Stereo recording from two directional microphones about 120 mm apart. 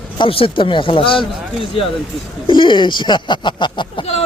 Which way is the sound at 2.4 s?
45° left (ahead or behind).